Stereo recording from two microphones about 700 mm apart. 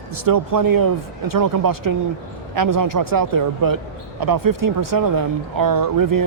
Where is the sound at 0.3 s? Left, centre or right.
Right.